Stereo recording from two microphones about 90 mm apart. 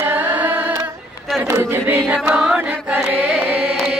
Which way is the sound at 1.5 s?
25° right (ahead or behind).